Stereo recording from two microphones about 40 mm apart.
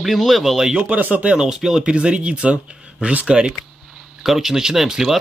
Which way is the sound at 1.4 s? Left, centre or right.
Centre.